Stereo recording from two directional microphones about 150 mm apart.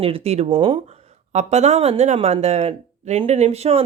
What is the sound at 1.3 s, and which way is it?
Speech, 50° right (ahead or behind).